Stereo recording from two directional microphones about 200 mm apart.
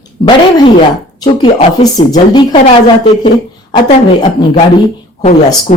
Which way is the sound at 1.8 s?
30° left (ahead or behind).